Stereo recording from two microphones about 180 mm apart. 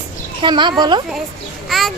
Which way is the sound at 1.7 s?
Centre (ahead or behind).